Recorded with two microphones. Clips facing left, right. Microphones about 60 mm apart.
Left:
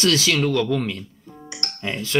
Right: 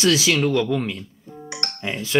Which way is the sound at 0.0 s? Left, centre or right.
Centre.